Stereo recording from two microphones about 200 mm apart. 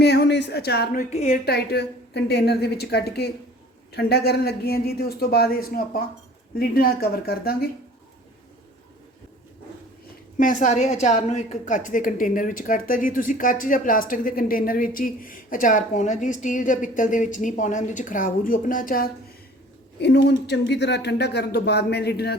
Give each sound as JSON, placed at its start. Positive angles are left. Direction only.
{"t": 0.0, "sound": "speech", "side_deg": 55}
{"t": 1.1, "sound": "a woman's voice", "side_deg": 35}
{"t": 1.5, "sound": "speech", "side_deg": 55}
{"t": 10.3, "sound": "a woman's voice", "side_deg": 40}
{"t": 20.0, "sound": "speech", "side_deg": 55}